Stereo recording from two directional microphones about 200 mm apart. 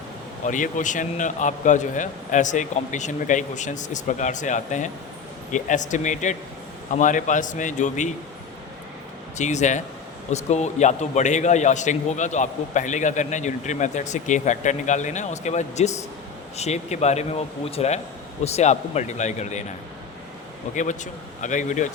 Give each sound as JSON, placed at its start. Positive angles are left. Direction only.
{"t": 0.4, "sound": "a man's voice", "side_deg": 40}
{"t": 9.4, "sound": "a man's voice", "side_deg": 35}
{"t": 20.7, "sound": "a man's voice", "side_deg": 40}